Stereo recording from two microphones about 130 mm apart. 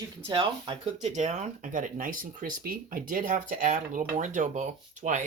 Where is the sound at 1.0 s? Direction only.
65° right (ahead or behind).